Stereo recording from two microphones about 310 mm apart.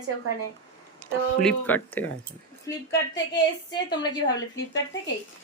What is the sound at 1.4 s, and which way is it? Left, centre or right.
Speech, centre.